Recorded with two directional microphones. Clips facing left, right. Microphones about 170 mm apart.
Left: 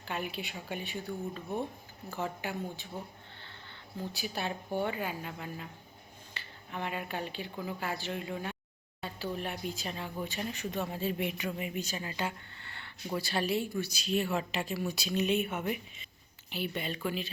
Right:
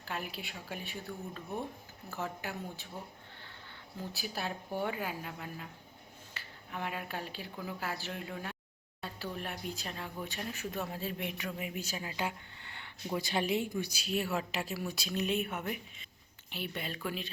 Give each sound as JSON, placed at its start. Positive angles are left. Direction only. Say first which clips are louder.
{"t": 0.0, "sound": "speech", "louder": "left 3 dB", "side_deg": 0}
{"t": 4.1, "sound": "speech", "louder": "left 2 dB", "side_deg": 0}